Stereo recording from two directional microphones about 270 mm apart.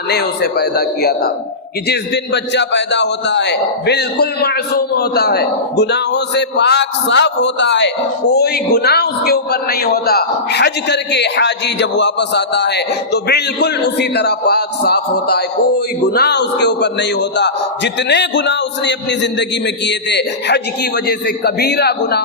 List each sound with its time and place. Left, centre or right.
0.1 s a man's voice: left